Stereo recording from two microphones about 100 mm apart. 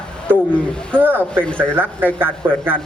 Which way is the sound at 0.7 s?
10° left (ahead or behind).